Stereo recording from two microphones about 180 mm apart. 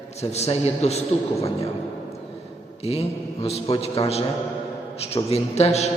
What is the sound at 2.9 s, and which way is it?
A man's voice, 35° left (ahead or behind).